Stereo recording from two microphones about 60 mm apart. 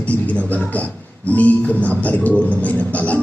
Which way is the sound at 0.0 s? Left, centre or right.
Left.